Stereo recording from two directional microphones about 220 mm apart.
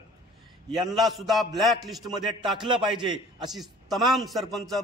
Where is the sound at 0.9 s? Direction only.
Centre (ahead or behind).